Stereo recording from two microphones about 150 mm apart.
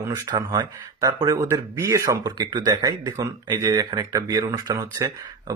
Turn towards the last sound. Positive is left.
turn(degrees=-20)  # may be behind; listen again after turning